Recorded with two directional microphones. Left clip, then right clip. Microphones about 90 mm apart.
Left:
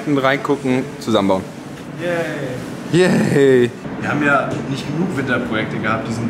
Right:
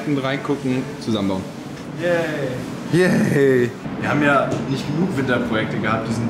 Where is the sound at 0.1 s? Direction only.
25° left (ahead or behind).